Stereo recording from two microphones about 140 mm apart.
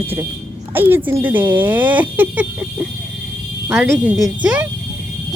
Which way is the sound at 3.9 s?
5° right (ahead or behind).